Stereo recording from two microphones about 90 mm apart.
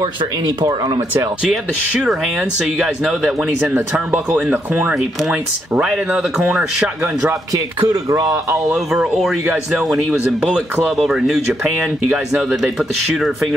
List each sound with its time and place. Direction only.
0.0 s speech: 45° right (ahead or behind)
1.4 s speech: 5° right (ahead or behind)
4.1 s speech: 20° right (ahead or behind)
5.8 s speech: 5° right (ahead or behind)
7.0 s speech: 25° right (ahead or behind)
7.5 s speech: 40° right (ahead or behind)
9.0 s speech: 5° right (ahead or behind)
11.1 s speech: 5° right (ahead or behind)
12.4 s speech: 5° right (ahead or behind)